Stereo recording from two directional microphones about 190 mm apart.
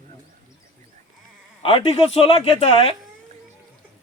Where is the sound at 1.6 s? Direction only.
30° left (ahead or behind).